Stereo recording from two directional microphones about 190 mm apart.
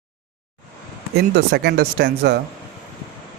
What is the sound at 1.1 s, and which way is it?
Speech, 60° right (ahead or behind).